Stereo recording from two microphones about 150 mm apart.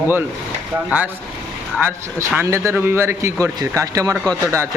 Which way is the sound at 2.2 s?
20° right (ahead or behind).